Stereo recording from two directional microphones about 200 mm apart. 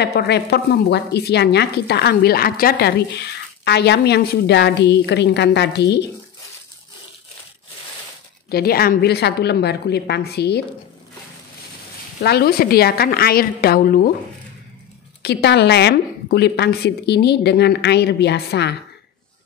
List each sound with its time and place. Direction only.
0.0 s a woman's voice: 55° left (ahead or behind)
8.5 s a woman's voice: 50° left (ahead or behind)
12.2 s a woman's voice: 55° left (ahead or behind)
15.2 s a woman's voice: 55° left (ahead or behind)